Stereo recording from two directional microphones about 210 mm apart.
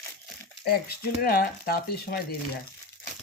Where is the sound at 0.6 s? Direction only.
45° left (ahead or behind).